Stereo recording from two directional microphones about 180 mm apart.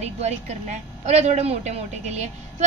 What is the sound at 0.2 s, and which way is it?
A woman's voice, 40° right (ahead or behind).